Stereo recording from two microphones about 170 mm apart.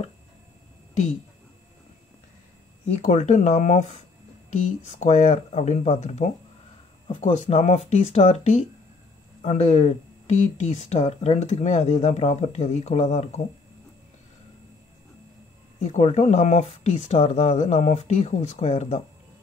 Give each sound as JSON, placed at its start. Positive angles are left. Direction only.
{"t": 3.0, "sound": "speech", "side_deg": 45}
{"t": 15.8, "sound": "speech", "side_deg": 40}